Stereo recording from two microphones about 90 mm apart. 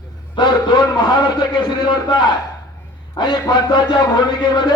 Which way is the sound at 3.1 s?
50° left (ahead or behind).